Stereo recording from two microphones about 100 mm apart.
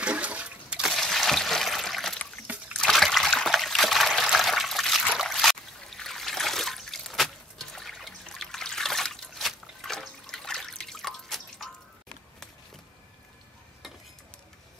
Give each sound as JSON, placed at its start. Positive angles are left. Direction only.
{"t": 0.0, "sound": "water", "side_deg": -10}
{"t": 0.9, "sound": "water", "side_deg": 5}
{"t": 2.5, "sound": "trickle", "side_deg": -15}
{"t": 2.8, "sound": "trickle", "side_deg": 0}